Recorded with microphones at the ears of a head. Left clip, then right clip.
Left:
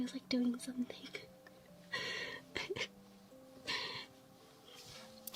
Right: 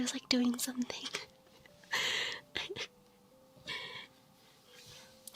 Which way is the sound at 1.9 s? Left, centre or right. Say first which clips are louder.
Right 7 dB; right.